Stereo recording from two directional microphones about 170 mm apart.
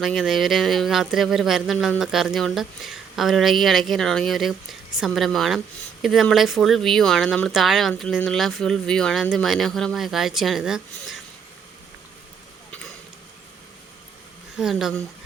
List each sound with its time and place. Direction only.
0.0 s speech: centre (ahead or behind)
14.5 s speech: centre (ahead or behind)